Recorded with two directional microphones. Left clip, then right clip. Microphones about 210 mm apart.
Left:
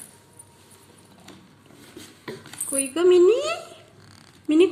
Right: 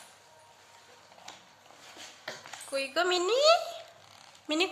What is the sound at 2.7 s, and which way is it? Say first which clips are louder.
A woman's voice: left 10 dB; 15° right (ahead or behind).